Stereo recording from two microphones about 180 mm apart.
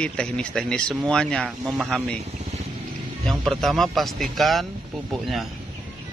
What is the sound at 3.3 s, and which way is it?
Speech, centre (ahead or behind).